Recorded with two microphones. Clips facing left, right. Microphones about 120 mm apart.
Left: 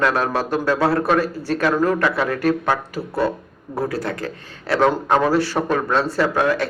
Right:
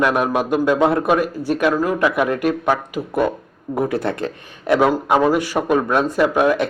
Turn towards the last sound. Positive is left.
turn(degrees=-15)  # may be behind; listen again after turning